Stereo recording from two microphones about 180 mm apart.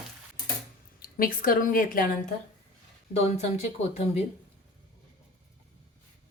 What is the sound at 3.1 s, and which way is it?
Speech, 35° left (ahead or behind).